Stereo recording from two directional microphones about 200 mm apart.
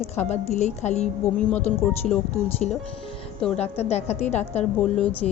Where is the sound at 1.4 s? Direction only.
5° left (ahead or behind).